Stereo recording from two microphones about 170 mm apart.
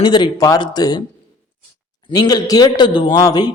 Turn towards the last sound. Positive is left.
turn(degrees=25)  # may be behind; listen again after turning